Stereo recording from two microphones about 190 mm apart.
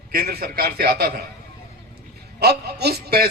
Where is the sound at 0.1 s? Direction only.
55° right (ahead or behind).